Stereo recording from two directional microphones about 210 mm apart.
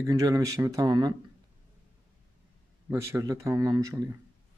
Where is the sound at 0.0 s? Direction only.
15° right (ahead or behind).